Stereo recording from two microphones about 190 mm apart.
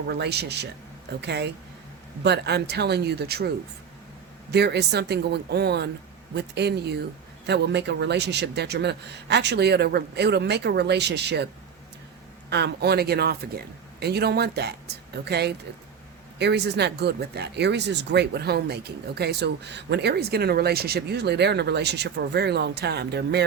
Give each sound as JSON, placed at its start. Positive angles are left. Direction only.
{"t": 0.1, "sound": "speech", "side_deg": -60}
{"t": 4.5, "sound": "speech", "side_deg": -60}
{"t": 12.5, "sound": "speech", "side_deg": -60}